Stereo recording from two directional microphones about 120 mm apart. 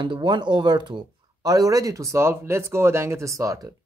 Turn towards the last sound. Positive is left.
turn(degrees=-25)  # may be behind; listen again after turning